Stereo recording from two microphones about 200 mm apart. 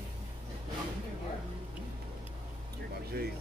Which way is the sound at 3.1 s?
50° right (ahead or behind).